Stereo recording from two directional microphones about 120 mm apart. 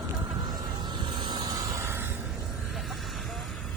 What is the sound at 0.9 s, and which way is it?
Vehicle, 40° right (ahead or behind).